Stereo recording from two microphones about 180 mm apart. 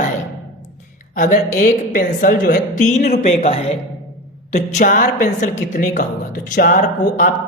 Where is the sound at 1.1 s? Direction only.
45° left (ahead or behind).